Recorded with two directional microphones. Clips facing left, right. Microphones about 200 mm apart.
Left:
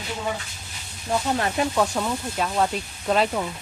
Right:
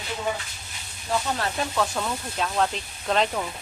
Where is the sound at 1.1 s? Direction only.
15° left (ahead or behind).